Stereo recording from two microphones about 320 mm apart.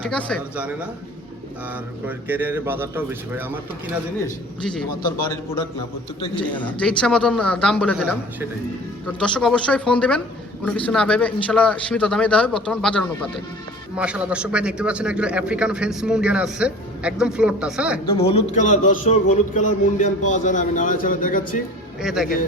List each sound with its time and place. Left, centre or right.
0.0 s a man's voice: centre
2.0 s a man's voice: centre
4.6 s a man's voice: centre
6.4 s a man's voice: centre
18.2 s a man's voice: centre
22.0 s a man's voice: centre